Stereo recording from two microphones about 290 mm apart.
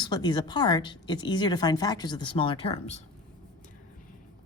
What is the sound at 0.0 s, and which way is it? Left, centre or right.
Speech, centre.